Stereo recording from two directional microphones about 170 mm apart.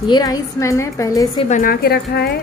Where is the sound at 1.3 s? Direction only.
45° left (ahead or behind); by 2.3 s 70° left (ahead or behind).